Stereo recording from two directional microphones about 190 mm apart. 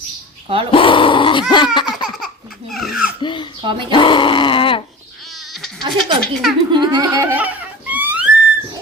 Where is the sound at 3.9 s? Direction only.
25° left (ahead or behind).